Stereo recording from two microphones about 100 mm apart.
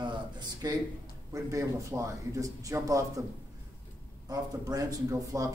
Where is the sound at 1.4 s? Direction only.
30° right (ahead or behind).